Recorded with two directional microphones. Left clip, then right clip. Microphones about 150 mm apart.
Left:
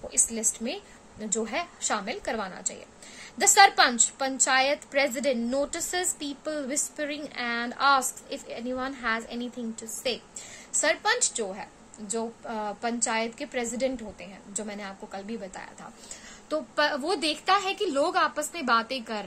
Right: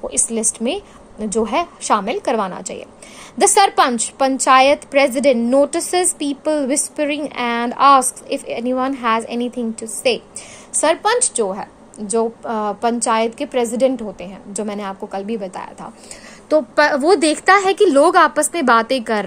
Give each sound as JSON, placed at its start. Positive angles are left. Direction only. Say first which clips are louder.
{"t": 0.1, "sound": "a woman's voice", "louder": "right 8 dB", "side_deg": -45}